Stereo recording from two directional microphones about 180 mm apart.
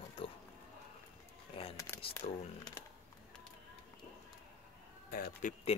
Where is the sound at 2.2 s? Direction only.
40° left (ahead or behind).